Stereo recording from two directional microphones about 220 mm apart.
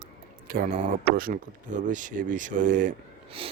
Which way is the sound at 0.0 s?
45° right (ahead or behind).